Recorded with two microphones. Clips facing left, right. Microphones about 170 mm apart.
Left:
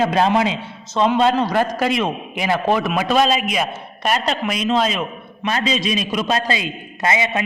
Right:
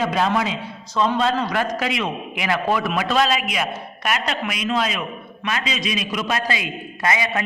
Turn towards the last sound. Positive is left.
turn(degrees=25)  # may be behind; listen again after turning